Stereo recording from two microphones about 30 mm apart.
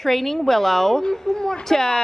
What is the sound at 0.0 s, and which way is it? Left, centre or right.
A woman's voice, centre.